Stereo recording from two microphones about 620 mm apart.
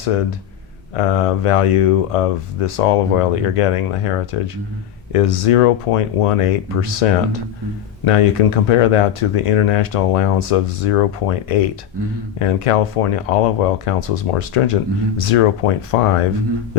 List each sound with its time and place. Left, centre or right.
0.0 s speech: left